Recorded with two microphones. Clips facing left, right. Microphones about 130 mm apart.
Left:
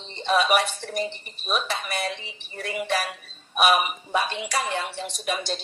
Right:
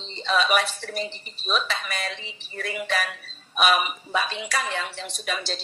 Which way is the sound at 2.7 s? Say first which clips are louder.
Left 2 dB; 10° left (ahead or behind).